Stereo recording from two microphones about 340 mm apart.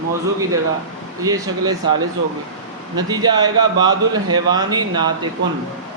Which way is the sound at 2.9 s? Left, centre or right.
Centre.